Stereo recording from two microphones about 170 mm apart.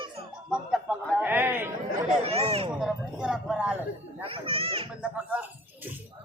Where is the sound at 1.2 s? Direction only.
10° right (ahead or behind).